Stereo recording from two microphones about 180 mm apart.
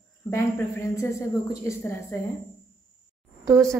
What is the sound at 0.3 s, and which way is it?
Speech, 15° left (ahead or behind).